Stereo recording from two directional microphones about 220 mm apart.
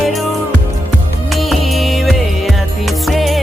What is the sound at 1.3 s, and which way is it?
Music, centre (ahead or behind).